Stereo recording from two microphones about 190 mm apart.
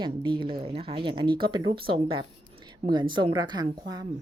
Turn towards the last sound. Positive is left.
turn(degrees=-20)  # may be behind; listen again after turning